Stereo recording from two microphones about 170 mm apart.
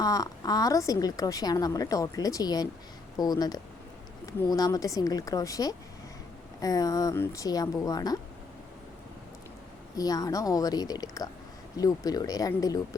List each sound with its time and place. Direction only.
0.0 s a woman's voice: 20° left (ahead or behind)
9.9 s a woman's voice: 20° left (ahead or behind)